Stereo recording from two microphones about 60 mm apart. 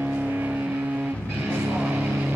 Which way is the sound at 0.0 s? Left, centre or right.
Right.